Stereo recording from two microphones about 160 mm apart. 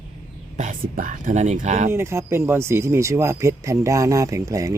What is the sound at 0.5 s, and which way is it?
Speech, 55° right (ahead or behind).